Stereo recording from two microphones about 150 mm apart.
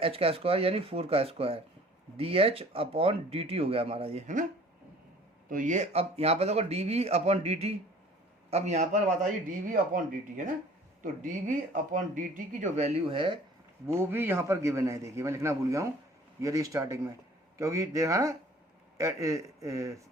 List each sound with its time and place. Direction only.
0.0 s speech: 40° right (ahead or behind)
5.5 s speech: 60° right (ahead or behind)
9.5 s speech: 65° right (ahead or behind); by 13.4 s 35° right (ahead or behind)
13.8 s a man's voice: 15° right (ahead or behind)